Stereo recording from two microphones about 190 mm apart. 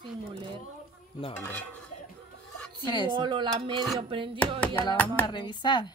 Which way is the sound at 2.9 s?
25° left (ahead or behind).